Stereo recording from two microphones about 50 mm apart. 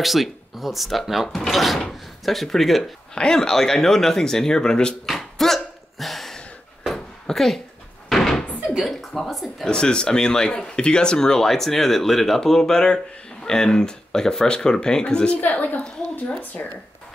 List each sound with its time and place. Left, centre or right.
0.0 s speech: centre
5.0 s hiccup: centre
6.9 s a sound: centre
8.1 s door: centre
8.8 s speech: centre
9.7 s speech: centre
15.4 s a woman's voice: left